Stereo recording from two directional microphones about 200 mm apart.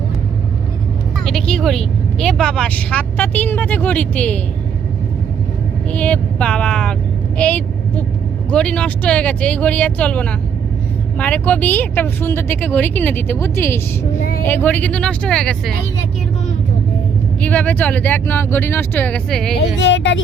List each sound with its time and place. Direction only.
1.2 s speech: centre (ahead or behind)
5.9 s a woman's voice: 5° left (ahead or behind)
17.4 s speech: 10° left (ahead or behind)
19.5 s speech: 65° left (ahead or behind)